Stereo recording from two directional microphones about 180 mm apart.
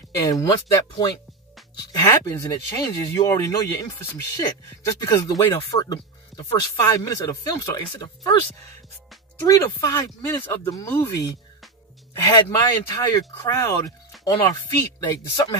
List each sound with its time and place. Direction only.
0.2 s speech: 20° left (ahead or behind)
9.4 s speech: 15° left (ahead or behind)
12.1 s speech: 20° left (ahead or behind)